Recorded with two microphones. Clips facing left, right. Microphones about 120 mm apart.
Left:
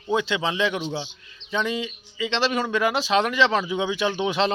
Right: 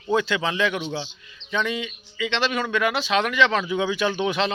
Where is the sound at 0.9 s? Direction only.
15° left (ahead or behind).